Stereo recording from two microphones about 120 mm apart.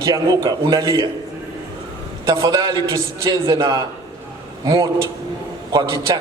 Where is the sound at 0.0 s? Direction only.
30° right (ahead or behind).